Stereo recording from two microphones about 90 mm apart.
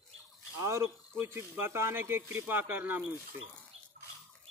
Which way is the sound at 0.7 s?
30° right (ahead or behind).